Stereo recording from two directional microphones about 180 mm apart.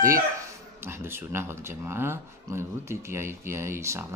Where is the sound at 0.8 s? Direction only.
15° right (ahead or behind).